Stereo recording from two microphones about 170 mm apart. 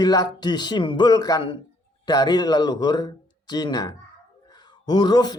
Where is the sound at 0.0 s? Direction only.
25° left (ahead or behind).